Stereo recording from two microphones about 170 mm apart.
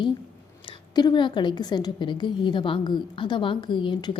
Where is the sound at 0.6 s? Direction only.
25° left (ahead or behind).